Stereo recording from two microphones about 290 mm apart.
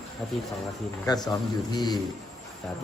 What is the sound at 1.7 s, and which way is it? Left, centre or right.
Speech, centre.